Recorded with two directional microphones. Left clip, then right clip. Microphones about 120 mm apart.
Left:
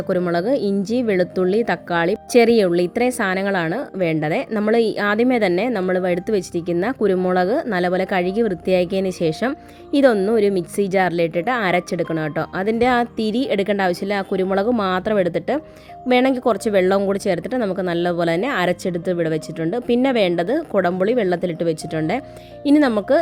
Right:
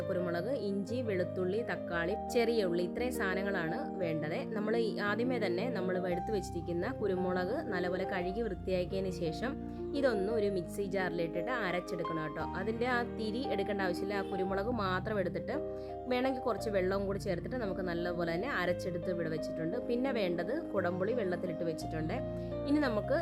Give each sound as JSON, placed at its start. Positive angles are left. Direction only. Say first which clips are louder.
{"t": 0.3, "sound": "speech", "louder": "left 16 dB", "side_deg": 30}